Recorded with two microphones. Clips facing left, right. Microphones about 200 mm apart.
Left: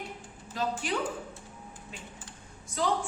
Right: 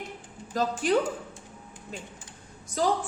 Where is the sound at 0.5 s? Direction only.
40° right (ahead or behind).